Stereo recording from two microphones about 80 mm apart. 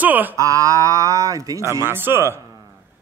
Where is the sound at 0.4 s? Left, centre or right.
Right.